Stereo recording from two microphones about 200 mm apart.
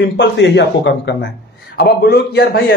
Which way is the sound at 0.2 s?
65° left (ahead or behind).